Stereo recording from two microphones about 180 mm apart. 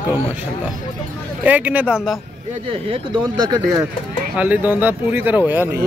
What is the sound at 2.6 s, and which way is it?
Speech, 30° right (ahead or behind).